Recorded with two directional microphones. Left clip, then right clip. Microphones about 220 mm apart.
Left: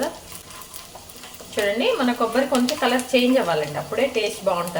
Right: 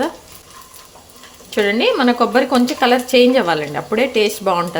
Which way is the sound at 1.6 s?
55° right (ahead or behind).